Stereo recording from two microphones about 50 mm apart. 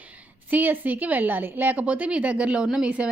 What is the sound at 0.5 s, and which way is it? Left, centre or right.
A woman's voice, right.